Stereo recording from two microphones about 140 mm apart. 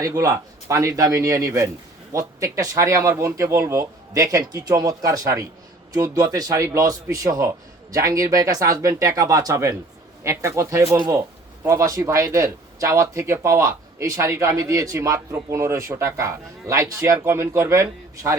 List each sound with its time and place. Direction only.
0.0 s speech: 25° right (ahead or behind)